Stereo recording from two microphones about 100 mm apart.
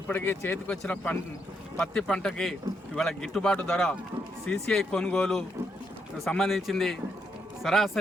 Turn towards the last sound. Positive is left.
turn(degrees=0)  # may be behind; listen again after turning